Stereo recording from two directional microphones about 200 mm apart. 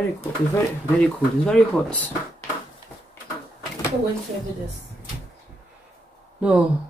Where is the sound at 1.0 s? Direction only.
5° left (ahead or behind).